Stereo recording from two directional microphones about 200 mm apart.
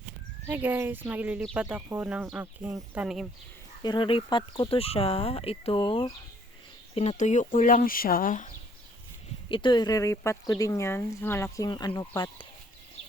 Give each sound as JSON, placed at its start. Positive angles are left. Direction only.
{"t": 0.4, "sound": "speech", "side_deg": -10}
{"t": 3.8, "sound": "speech", "side_deg": 25}
{"t": 9.5, "sound": "speech", "side_deg": 25}